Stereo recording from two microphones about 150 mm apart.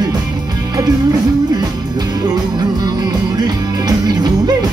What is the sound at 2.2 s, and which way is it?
Music, 25° right (ahead or behind).